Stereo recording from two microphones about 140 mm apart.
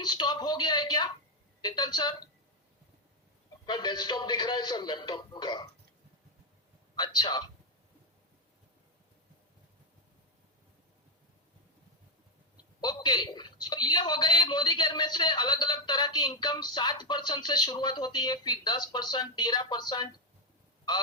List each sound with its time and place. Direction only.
0.0 s a woman's voice: 30° left (ahead or behind)
3.7 s a man's voice: 30° left (ahead or behind)
6.9 s a woman's voice: 30° left (ahead or behind)
12.8 s a woman's voice: 30° left (ahead or behind)